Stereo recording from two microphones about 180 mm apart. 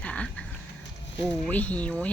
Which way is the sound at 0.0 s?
5° left (ahead or behind).